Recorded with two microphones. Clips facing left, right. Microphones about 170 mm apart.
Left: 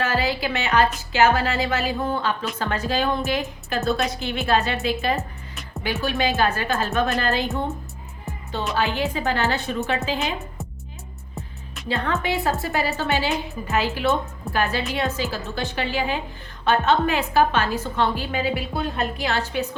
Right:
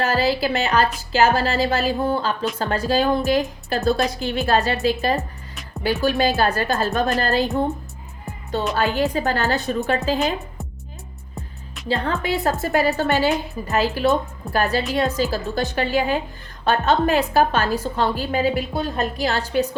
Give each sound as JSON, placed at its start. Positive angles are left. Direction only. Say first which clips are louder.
{"t": 0.0, "sound": "a woman's voice", "louder": "right 4 dB", "side_deg": -35}
{"t": 8.7, "sound": "a woman's voice", "louder": "right 2 dB", "side_deg": -40}
{"t": 11.9, "sound": "a woman's voice", "louder": "right 2 dB", "side_deg": -35}